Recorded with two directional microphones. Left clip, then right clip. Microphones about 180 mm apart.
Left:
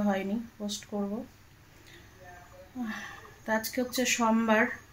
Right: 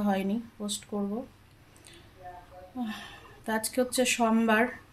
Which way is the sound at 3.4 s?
25° right (ahead or behind).